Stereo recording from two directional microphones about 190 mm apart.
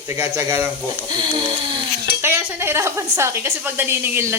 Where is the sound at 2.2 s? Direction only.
10° right (ahead or behind).